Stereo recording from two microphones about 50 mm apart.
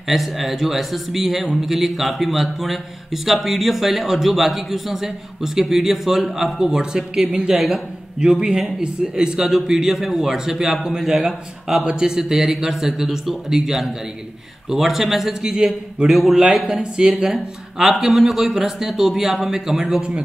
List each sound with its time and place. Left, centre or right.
0.1 s a man's voice: centre